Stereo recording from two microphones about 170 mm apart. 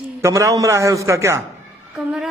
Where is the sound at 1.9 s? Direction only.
5° right (ahead or behind).